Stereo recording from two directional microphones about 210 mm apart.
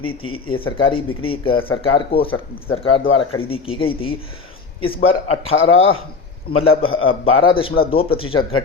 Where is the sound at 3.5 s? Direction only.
25° left (ahead or behind).